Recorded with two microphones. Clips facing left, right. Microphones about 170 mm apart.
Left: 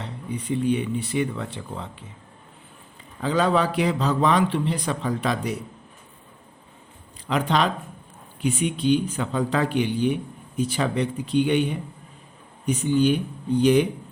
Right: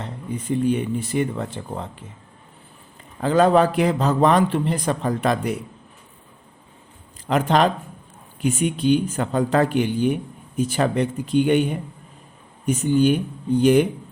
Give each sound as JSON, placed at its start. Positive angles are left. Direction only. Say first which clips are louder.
{"t": 0.0, "sound": "a man's voice", "louder": "right 2 dB", "side_deg": -45}
{"t": 3.2, "sound": "a man's voice", "louder": "right 5 dB", "side_deg": -50}
{"t": 7.3, "sound": "a man's voice", "louder": "right 4 dB", "side_deg": -45}